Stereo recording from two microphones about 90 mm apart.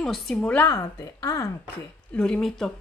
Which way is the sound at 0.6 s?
35° left (ahead or behind).